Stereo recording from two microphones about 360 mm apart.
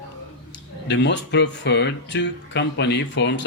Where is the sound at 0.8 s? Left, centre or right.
Left.